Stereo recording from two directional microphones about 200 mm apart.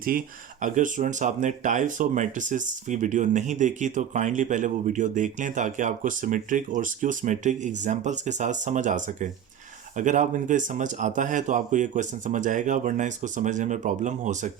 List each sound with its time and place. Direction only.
0.0 s speech: 45° right (ahead or behind)